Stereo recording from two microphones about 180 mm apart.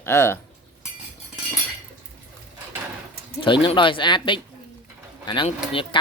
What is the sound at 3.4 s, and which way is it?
Speech, 30° left (ahead or behind).